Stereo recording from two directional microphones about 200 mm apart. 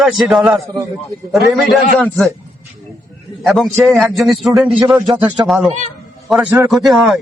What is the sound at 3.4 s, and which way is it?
Music, centre (ahead or behind).